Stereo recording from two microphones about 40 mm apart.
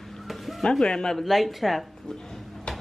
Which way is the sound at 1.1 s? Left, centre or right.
Centre.